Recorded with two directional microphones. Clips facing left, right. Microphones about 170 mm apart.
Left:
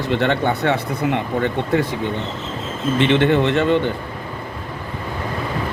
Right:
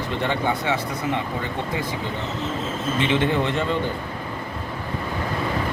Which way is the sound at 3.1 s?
70° left (ahead or behind).